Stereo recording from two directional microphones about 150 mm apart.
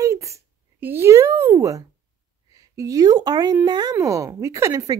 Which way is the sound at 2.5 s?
25° right (ahead or behind).